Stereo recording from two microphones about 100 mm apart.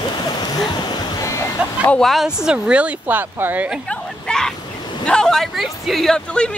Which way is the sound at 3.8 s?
5° left (ahead or behind).